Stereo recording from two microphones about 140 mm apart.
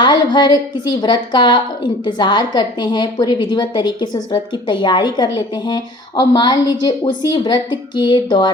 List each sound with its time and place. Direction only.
0.0 s a woman's voice: 30° left (ahead or behind)